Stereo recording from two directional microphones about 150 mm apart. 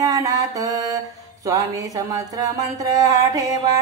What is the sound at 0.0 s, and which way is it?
Mantra, 25° right (ahead or behind).